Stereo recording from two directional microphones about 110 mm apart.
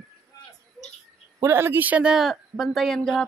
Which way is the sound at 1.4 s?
20° right (ahead or behind).